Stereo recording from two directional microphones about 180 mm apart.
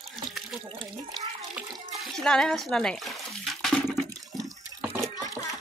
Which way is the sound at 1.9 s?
Centre (ahead or behind).